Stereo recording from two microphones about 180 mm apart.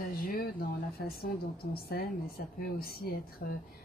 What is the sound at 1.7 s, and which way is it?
A woman's voice, 55° left (ahead or behind).